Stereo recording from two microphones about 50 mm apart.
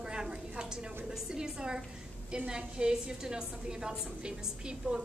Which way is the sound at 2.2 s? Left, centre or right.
Centre.